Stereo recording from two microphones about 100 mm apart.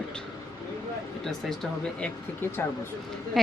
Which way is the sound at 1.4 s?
5° left (ahead or behind).